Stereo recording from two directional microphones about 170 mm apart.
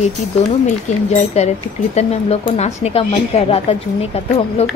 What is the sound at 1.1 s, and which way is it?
Speech, 40° left (ahead or behind).